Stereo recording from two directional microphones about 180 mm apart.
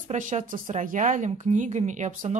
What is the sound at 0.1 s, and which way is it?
Speech, 45° right (ahead or behind).